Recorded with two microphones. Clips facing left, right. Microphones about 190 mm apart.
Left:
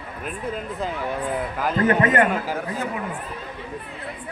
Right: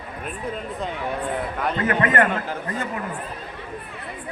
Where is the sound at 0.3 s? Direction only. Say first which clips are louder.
Left 1 dB; centre (ahead or behind).